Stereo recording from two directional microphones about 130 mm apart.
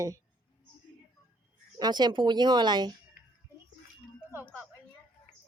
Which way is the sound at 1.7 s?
35° right (ahead or behind).